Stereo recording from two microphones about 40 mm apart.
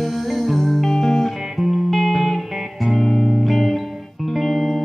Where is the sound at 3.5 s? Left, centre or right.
Centre.